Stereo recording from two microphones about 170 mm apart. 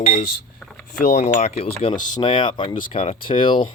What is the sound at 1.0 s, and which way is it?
Speech, 45° left (ahead or behind).